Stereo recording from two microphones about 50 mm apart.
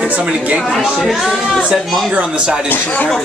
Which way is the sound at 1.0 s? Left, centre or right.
Centre.